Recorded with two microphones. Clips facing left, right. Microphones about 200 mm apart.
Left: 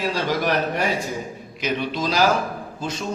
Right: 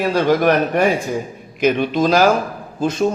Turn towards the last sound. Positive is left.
turn(degrees=-55)  # may be behind; listen again after turning